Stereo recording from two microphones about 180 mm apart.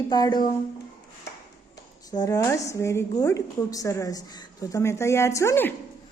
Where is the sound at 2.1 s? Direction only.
20° left (ahead or behind).